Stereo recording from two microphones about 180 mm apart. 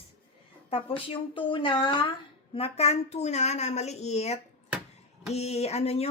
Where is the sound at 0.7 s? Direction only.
30° left (ahead or behind).